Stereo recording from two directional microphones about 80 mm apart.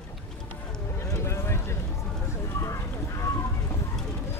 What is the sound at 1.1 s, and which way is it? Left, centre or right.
Boat, left.